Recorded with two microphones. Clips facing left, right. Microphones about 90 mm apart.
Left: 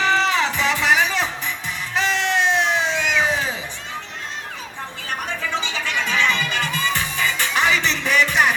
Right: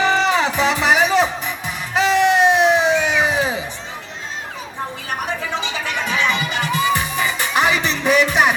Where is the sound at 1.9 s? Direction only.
15° right (ahead or behind).